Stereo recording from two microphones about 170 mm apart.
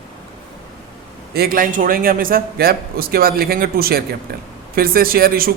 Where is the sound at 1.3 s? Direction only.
60° right (ahead or behind).